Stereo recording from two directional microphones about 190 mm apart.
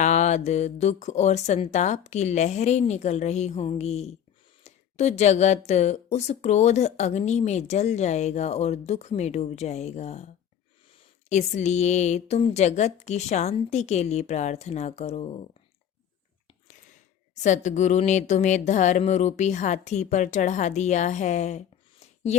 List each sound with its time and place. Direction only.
0.0 s speech: 40° left (ahead or behind)
11.3 s speech: 40° left (ahead or behind)
17.3 s speech: 40° left (ahead or behind)